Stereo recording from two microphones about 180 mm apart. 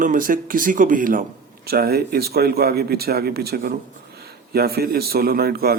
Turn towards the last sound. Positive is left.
turn(degrees=-60)  # may be behind; listen again after turning